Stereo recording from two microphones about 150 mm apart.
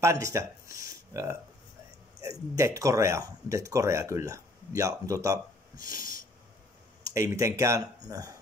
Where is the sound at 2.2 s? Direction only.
20° right (ahead or behind).